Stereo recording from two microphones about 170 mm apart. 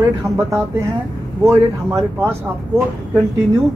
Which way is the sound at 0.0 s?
15° right (ahead or behind).